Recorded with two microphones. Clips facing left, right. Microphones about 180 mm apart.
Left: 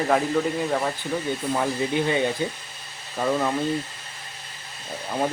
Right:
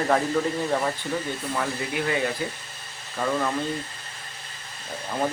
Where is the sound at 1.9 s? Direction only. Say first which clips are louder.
Left 2 dB; 25° left (ahead or behind).